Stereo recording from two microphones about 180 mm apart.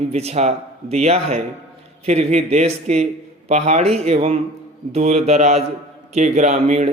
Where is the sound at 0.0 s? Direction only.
35° right (ahead or behind).